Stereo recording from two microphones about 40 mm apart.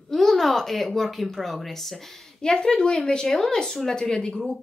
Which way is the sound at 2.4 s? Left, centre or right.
Centre.